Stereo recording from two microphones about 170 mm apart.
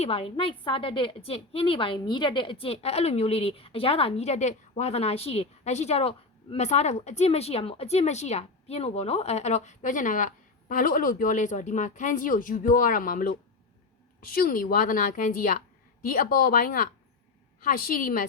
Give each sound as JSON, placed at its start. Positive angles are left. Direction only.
{"t": 0.0, "sound": "a woman's voice", "side_deg": 35}